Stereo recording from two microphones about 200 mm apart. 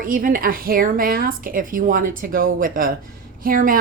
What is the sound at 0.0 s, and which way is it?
A woman's voice, 45° right (ahead or behind).